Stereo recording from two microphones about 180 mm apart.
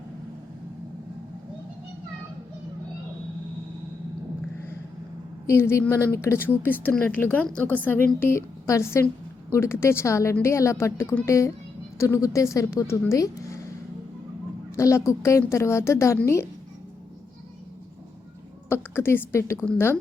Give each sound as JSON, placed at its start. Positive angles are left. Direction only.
{"t": 5.5, "sound": "a woman's voice", "side_deg": 15}
{"t": 14.8, "sound": "a woman's voice", "side_deg": 15}
{"t": 18.7, "sound": "a woman's voice", "side_deg": 15}